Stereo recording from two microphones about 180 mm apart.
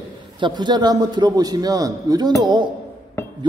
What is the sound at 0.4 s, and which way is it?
A man's voice, 25° right (ahead or behind).